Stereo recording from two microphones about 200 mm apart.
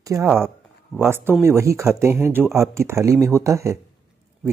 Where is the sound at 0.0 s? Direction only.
15° right (ahead or behind).